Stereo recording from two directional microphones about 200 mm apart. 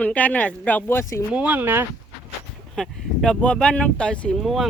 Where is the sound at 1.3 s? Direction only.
5° right (ahead or behind).